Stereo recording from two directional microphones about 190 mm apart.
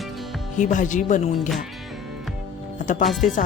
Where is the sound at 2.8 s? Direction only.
40° left (ahead or behind).